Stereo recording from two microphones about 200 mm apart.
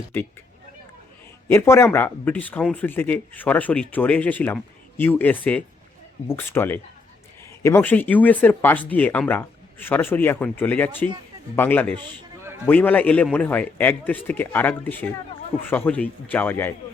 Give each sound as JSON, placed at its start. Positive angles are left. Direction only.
{"t": 1.5, "sound": "speech", "side_deg": 15}
{"t": 11.9, "sound": "a sound", "side_deg": -20}
{"t": 12.6, "sound": "speech", "side_deg": 10}